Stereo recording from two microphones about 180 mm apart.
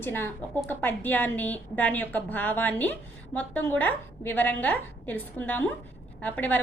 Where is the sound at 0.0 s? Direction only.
10° left (ahead or behind).